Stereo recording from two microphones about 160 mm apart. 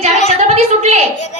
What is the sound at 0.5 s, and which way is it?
Speech, 40° right (ahead or behind).